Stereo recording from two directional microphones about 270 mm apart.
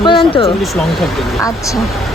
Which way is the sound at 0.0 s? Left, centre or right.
Centre.